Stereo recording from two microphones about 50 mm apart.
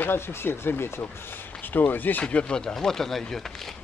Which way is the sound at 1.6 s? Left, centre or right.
Left.